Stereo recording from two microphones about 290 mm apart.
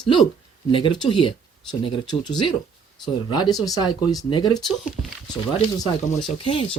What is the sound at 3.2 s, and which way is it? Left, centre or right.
Speech, centre.